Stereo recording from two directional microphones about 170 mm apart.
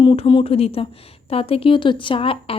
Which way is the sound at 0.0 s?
30° left (ahead or behind).